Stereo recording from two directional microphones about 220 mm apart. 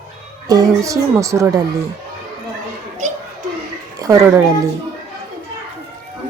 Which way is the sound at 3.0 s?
30° right (ahead or behind).